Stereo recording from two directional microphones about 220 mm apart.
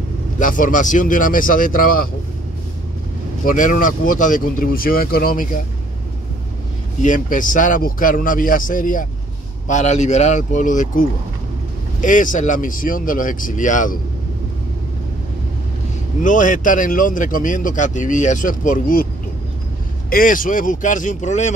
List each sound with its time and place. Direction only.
0.4 s speech: 40° left (ahead or behind)
3.4 s speech: 40° left (ahead or behind)
7.0 s speech: 35° left (ahead or behind)
16.2 s speech: 35° left (ahead or behind)
20.1 s speech: 40° left (ahead or behind)